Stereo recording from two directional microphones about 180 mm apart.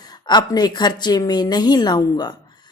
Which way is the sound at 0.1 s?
25° left (ahead or behind).